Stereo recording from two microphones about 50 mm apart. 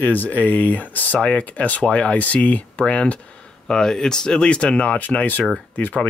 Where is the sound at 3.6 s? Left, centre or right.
Centre; by 5.4 s left.